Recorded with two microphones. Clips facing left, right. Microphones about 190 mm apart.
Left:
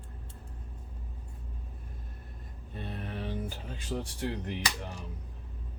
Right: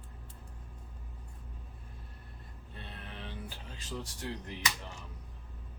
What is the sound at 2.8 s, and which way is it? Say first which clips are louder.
Music: left 9 dB; 45° left (ahead or behind).